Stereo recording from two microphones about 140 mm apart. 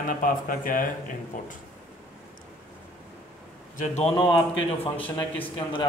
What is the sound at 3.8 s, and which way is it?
A man's voice, 50° left (ahead or behind).